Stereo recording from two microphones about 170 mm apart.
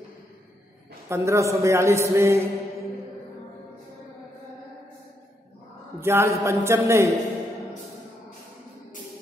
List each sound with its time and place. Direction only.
1.0 s a man's voice: 15° right (ahead or behind)
5.9 s a man's voice: 15° right (ahead or behind)